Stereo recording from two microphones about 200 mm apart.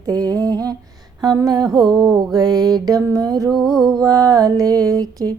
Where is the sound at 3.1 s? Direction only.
20° right (ahead or behind).